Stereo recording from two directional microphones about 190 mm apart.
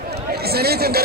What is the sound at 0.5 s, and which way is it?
Chatter, 55° right (ahead or behind).